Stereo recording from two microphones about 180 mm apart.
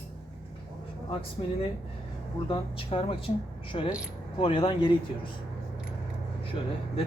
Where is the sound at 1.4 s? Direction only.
35° left (ahead or behind).